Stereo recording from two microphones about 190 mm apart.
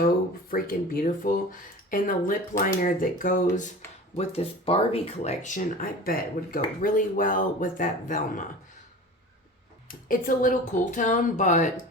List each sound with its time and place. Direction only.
0.0 s speech: 50° left (ahead or behind)
4.1 s speech: 30° left (ahead or behind)
9.9 s speech: 45° left (ahead or behind)